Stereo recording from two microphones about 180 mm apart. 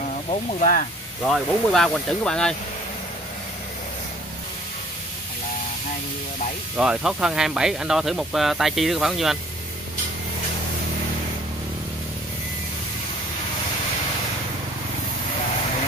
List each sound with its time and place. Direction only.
0.5 s speech: 50° left (ahead or behind)
1.2 s speech: centre (ahead or behind)
6.8 s speech: 5° right (ahead or behind)